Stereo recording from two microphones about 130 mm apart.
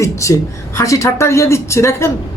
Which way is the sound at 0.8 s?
20° left (ahead or behind).